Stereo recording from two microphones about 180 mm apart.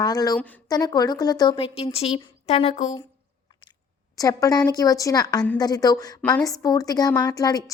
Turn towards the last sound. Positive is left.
turn(degrees=20)  # may be behind; listen again after turning